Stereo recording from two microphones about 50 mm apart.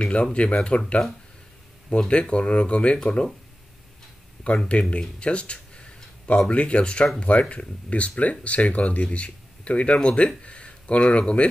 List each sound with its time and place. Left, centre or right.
0.0 s speech: left
4.6 s speech: left